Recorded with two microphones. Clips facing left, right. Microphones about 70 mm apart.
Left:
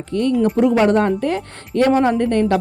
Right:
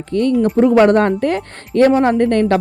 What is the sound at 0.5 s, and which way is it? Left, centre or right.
Speech, right.